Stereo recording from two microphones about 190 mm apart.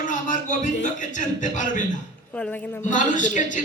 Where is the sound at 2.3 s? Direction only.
5° left (ahead or behind).